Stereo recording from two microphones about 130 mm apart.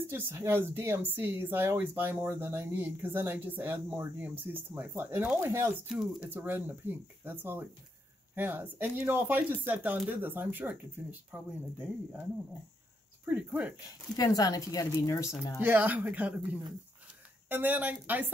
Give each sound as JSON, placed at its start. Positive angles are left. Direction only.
{"t": 0.0, "sound": "speech", "side_deg": -20}
{"t": 13.2, "sound": "speech", "side_deg": -15}
{"t": 14.1, "sound": "speech", "side_deg": 30}
{"t": 15.6, "sound": "speech", "side_deg": -15}
{"t": 17.5, "sound": "speech", "side_deg": -15}